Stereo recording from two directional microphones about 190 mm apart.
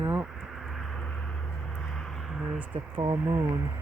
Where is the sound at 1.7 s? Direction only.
5° left (ahead or behind).